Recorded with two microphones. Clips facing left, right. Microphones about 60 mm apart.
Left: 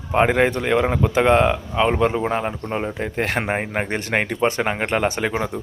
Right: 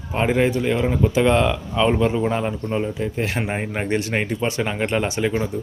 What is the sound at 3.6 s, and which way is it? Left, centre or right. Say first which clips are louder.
Speech: right 1 dB; left.